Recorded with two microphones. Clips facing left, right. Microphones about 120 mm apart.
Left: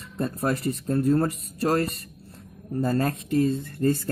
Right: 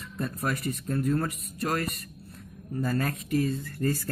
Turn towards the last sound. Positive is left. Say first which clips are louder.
# left 5 dB
turn(degrees=25)  # may be behind; listen again after turning